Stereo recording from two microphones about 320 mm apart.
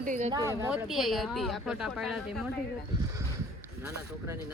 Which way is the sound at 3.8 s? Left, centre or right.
Centre.